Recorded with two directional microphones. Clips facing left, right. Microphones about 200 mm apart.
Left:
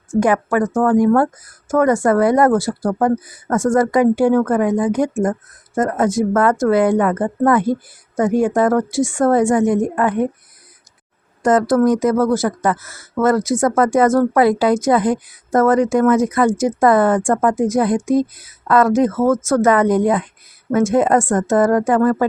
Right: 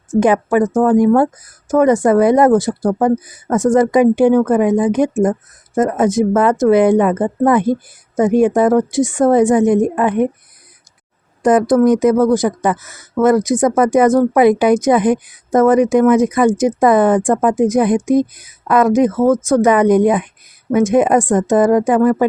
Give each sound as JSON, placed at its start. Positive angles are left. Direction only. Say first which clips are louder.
{"t": 0.1, "sound": "speech", "louder": "right 3 dB", "side_deg": -20}
{"t": 11.4, "sound": "speech", "louder": "right 3 dB", "side_deg": -15}